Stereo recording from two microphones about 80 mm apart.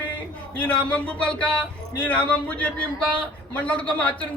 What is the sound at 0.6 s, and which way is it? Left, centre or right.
A man's voice, centre.